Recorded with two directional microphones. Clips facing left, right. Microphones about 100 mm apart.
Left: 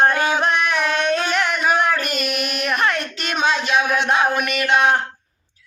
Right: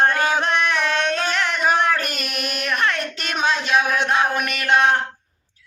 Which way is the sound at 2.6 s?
10° left (ahead or behind).